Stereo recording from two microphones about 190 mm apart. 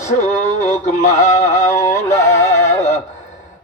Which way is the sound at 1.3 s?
35° left (ahead or behind).